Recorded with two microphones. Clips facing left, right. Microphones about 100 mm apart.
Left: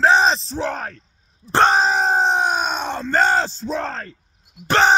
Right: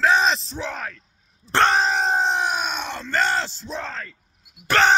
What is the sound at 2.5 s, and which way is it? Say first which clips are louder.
Groan: left 4 dB; 40° left (ahead or behind).